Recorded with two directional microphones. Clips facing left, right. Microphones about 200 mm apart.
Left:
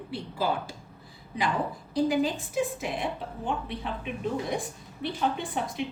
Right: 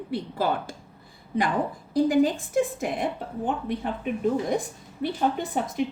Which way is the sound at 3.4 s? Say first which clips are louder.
Right 5 dB; 50° right (ahead or behind).